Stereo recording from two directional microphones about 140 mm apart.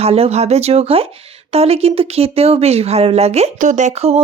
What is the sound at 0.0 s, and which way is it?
Speech, 50° right (ahead or behind).